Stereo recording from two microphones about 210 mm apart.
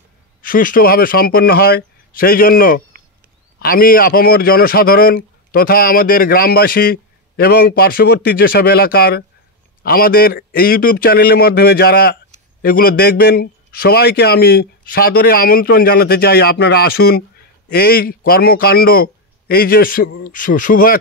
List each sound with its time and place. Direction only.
0.4 s a man's voice: 40° left (ahead or behind)